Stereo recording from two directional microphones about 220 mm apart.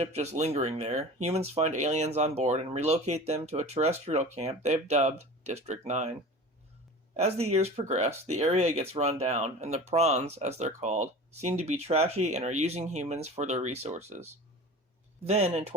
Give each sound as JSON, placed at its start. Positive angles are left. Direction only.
{"t": 0.1, "sound": "speech", "side_deg": -30}
{"t": 7.4, "sound": "speech", "side_deg": -30}